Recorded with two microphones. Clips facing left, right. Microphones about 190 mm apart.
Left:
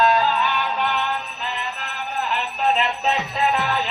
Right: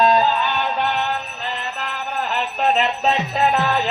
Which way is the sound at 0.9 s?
45° right (ahead or behind).